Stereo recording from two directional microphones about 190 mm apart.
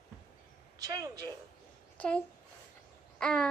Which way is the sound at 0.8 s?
20° right (ahead or behind).